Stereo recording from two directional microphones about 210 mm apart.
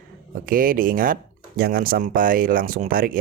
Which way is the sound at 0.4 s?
40° right (ahead or behind).